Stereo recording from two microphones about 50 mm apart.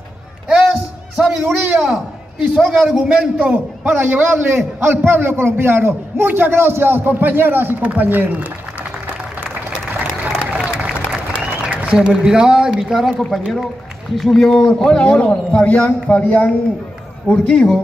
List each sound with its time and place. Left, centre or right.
0.5 s a sound: centre
2.7 s a man's voice: centre
3.9 s a man's voice: right
10.2 s applause: right
11.7 s a sound: right
12.2 s speech: centre; by 16.4 s left
17.3 s speech: centre